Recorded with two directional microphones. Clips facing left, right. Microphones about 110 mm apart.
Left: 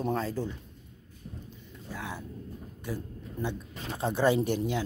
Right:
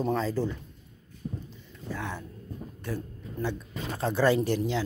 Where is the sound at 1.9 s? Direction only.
10° left (ahead or behind).